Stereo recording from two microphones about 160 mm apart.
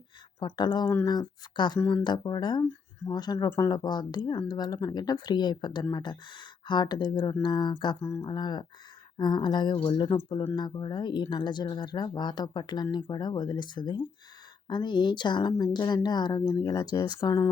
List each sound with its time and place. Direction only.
0.3 s speech: 25° left (ahead or behind)